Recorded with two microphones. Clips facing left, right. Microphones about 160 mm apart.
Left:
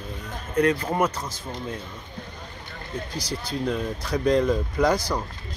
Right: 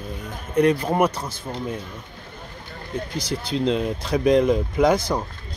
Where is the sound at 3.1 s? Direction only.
25° right (ahead or behind).